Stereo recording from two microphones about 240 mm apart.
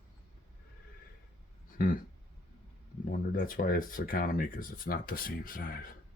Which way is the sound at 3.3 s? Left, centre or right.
Left.